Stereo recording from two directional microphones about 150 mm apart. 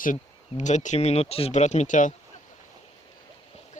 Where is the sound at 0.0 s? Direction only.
55° left (ahead or behind).